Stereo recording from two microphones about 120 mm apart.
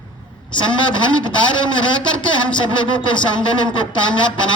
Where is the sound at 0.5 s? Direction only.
40° left (ahead or behind).